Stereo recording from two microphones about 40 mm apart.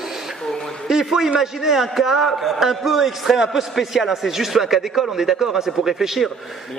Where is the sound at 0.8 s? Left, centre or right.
Centre.